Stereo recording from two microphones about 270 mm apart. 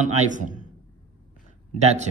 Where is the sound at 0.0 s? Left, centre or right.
Right.